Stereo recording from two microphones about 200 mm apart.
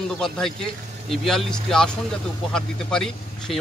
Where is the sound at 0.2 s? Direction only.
5° left (ahead or behind).